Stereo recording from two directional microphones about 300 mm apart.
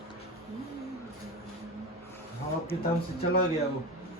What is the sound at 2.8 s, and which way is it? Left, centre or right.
Speech, left.